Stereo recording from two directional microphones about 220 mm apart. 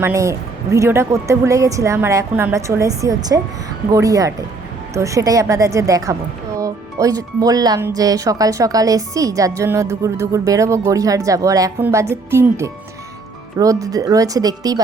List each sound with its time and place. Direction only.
0.0 s speech: 15° right (ahead or behind)